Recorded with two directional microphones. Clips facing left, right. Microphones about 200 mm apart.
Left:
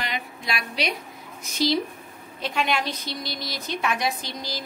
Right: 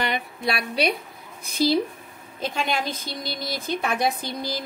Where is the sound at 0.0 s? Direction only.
60° right (ahead or behind).